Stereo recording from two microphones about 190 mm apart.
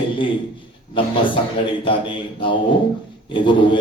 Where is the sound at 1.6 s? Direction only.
25° left (ahead or behind).